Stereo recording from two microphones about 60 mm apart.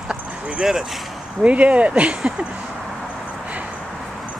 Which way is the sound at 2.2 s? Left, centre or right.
Centre.